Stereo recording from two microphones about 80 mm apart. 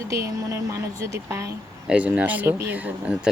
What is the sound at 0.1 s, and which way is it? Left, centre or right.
Speech, right.